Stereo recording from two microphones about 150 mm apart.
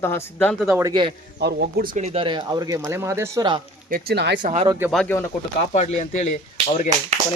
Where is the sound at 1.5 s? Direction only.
90° right.